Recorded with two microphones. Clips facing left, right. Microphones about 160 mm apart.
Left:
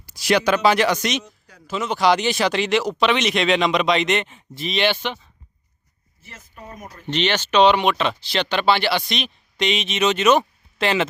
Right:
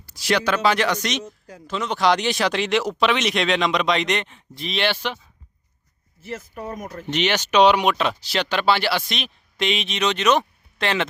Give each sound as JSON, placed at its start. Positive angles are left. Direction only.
{"t": 0.0, "sound": "speech", "side_deg": 15}
{"t": 6.5, "sound": "speech", "side_deg": -45}
{"t": 7.1, "sound": "speech", "side_deg": -10}